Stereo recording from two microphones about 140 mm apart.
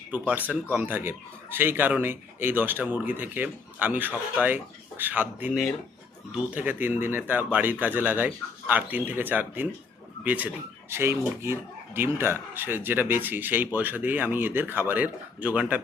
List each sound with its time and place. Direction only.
0.1 s speech: 10° right (ahead or behind)